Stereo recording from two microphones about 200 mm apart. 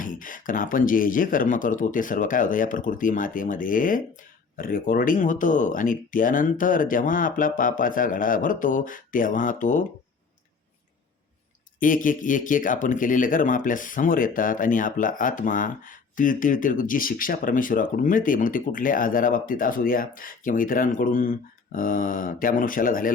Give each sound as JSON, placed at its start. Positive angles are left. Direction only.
{"t": 0.0, "sound": "speech", "side_deg": 40}
{"t": 11.8, "sound": "speech", "side_deg": 40}